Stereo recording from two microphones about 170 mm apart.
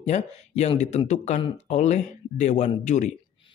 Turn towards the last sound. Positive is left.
turn(degrees=45)  # may be behind; listen again after turning